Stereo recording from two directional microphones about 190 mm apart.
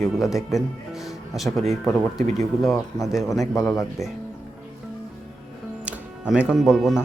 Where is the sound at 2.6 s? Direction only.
Centre (ahead or behind).